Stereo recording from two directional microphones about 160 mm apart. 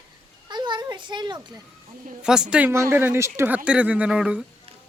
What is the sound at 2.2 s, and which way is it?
A woman's voice, 5° right (ahead or behind).